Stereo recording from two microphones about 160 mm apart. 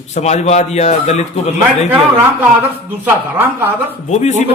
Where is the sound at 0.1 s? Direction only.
45° left (ahead or behind).